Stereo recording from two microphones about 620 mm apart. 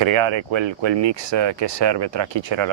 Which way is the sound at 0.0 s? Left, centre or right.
Right.